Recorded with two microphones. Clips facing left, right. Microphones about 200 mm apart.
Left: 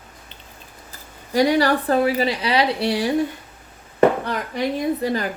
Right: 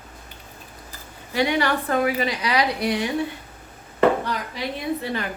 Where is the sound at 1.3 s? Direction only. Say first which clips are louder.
Left 5 dB; 40° left (ahead or behind).